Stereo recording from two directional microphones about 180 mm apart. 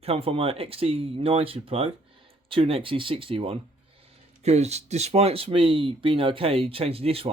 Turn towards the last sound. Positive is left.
turn(degrees=-35)  # may be behind; listen again after turning